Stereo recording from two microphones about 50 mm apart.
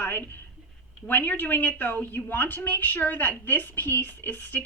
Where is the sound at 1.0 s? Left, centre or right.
Left.